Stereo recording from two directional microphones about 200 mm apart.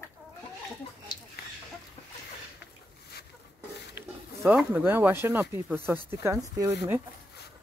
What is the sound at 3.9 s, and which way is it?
Speech, 10° right (ahead or behind).